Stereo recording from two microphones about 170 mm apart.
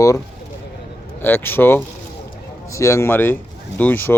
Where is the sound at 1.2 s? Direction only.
10° left (ahead or behind).